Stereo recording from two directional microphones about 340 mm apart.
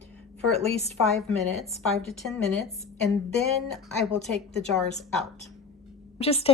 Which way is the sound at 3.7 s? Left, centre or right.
Centre.